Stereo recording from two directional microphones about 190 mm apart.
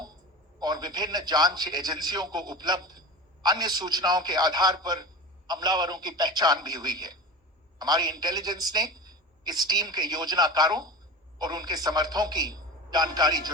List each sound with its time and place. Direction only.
0.6 s a woman's voice: 20° right (ahead or behind)